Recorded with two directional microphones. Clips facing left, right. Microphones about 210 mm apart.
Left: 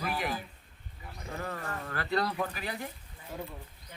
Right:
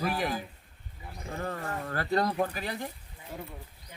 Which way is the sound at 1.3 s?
35° right (ahead or behind).